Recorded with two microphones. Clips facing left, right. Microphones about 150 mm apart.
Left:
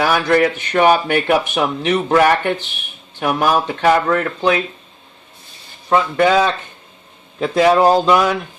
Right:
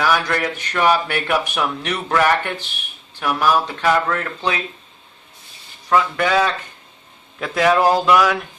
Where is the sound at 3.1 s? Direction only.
45° left (ahead or behind).